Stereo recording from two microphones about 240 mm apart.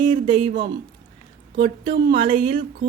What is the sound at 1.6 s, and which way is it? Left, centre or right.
Speech, centre.